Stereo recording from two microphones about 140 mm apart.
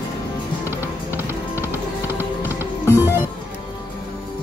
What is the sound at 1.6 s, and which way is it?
Music, 15° right (ahead or behind).